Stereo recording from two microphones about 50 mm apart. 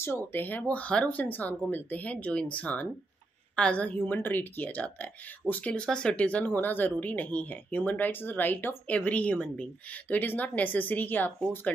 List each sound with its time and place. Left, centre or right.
0.0 s a woman's voice: left
5.7 s a woman's voice: centre
10.1 s speech: left